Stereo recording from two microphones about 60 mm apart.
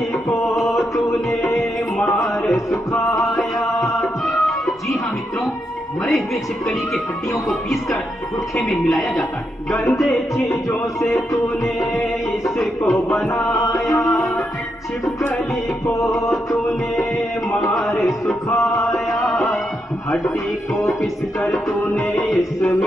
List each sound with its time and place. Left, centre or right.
2.1 s music: centre
2.7 s music: left
8.8 s music: centre
12.4 s music: centre
13.5 s music: left
15.9 s music: left
18.6 s music: left
20.7 s music: centre